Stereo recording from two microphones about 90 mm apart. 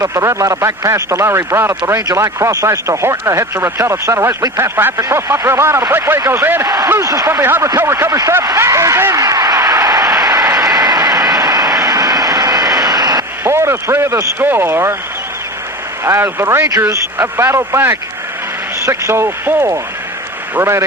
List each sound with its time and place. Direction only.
0.0 s speech: 35° right (ahead or behind)
7.0 s speech: 40° right (ahead or behind)
8.4 s a sound: 35° right (ahead or behind)
13.4 s speech: 30° right (ahead or behind)
16.0 s speech: 25° right (ahead or behind)